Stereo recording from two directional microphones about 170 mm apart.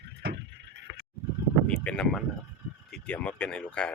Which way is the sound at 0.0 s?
80° right.